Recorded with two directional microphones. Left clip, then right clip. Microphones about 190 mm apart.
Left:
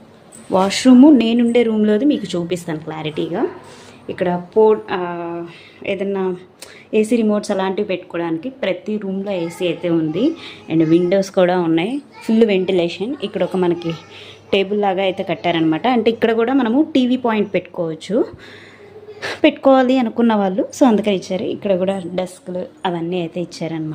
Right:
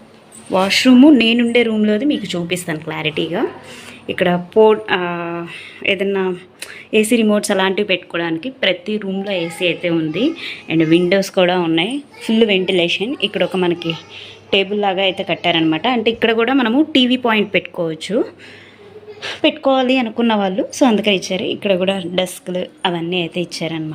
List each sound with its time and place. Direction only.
0.5 s a woman's voice: 15° left (ahead or behind)
4.0 s a woman's voice: 10° right (ahead or behind); by 18.3 s 10° left (ahead or behind)
19.2 s a woman's voice: 30° left (ahead or behind)
19.9 s a woman's voice: 10° left (ahead or behind)